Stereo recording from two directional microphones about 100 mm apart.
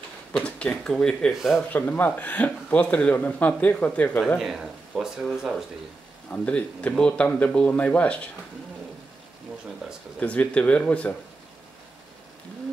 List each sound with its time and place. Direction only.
0.4 s speech: 10° left (ahead or behind)
1.3 s speech: 5° right (ahead or behind)
1.7 s speech: 20° left (ahead or behind)
4.4 s speech: 5° right (ahead or behind)
6.3 s speech: 15° left (ahead or behind)
10.2 s speech: 15° left (ahead or behind)